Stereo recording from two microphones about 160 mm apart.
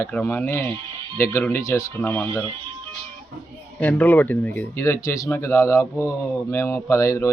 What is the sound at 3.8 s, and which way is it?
Speech, 10° left (ahead or behind).